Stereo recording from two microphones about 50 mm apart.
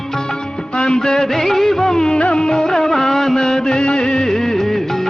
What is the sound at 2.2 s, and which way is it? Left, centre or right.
Music, centre.